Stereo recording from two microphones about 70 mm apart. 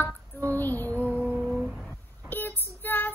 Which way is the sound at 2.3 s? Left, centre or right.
Left.